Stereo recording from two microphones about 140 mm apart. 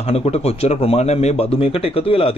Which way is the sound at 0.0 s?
45° left (ahead or behind).